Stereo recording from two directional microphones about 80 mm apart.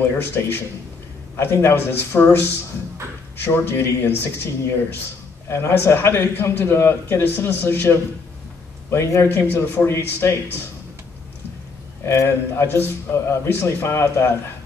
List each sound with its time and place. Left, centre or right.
0.0 s speech: left
3.4 s a man's voice: left
12.0 s a man's voice: left